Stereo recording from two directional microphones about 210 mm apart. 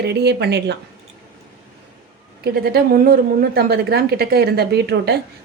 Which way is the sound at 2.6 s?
50° right (ahead or behind).